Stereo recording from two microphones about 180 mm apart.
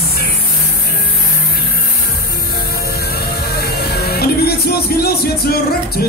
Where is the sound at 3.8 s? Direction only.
60° left (ahead or behind).